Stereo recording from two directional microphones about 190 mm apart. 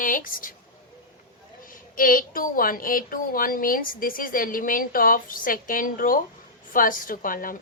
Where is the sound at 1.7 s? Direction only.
45° left (ahead or behind).